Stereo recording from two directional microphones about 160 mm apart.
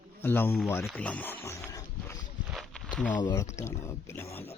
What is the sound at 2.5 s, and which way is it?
Walk, 5° left (ahead or behind).